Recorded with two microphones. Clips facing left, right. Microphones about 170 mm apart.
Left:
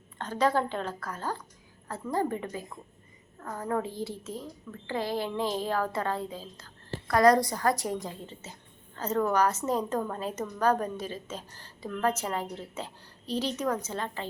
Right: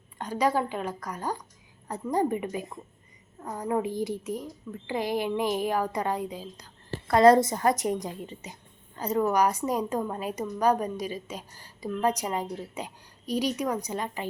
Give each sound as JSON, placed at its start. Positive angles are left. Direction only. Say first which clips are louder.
{"t": 0.2, "sound": "a woman's voice", "louder": "right 1 dB", "side_deg": -10}